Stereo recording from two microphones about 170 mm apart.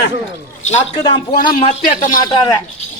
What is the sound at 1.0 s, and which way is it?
A man's voice, 30° left (ahead or behind).